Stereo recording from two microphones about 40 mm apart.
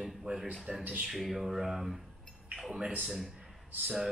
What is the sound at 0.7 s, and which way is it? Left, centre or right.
Music, centre.